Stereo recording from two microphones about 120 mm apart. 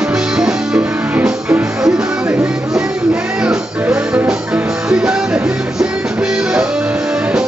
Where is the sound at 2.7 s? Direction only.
5° right (ahead or behind).